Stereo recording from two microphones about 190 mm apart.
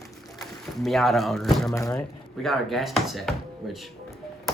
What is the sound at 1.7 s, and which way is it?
Speech, 15° left (ahead or behind).